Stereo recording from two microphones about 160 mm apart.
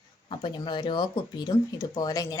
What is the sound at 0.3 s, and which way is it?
Speech, 30° left (ahead or behind).